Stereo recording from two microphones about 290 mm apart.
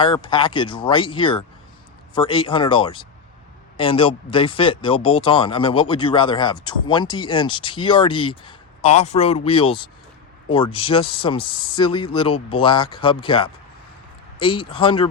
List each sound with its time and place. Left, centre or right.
0.0 s speech: centre